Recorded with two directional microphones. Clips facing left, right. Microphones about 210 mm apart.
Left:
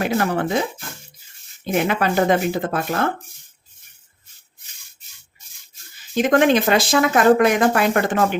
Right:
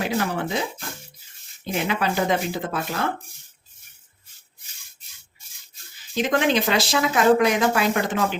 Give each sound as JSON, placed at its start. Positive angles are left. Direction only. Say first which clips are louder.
{"t": 0.0, "sound": "speech", "louder": "left 4 dB", "side_deg": 50}
{"t": 1.7, "sound": "speech", "louder": "left 5 dB", "side_deg": 55}
{"t": 6.1, "sound": "speech", "louder": "left 5 dB", "side_deg": 50}